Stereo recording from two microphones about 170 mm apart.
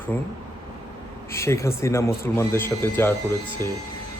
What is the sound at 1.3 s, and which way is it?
A man's voice, 15° left (ahead or behind).